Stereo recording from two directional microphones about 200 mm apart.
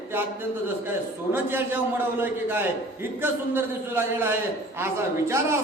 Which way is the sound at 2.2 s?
10° right (ahead or behind).